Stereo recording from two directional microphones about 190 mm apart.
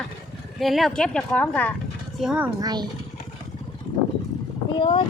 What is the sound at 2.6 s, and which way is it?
Speech, 20° right (ahead or behind).